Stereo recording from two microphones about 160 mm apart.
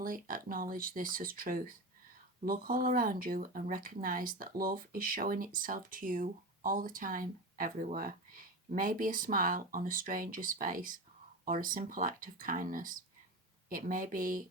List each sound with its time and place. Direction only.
0.0 s speech: 60° right (ahead or behind)